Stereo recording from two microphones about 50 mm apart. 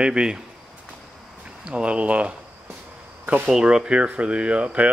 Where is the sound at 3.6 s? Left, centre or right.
Centre.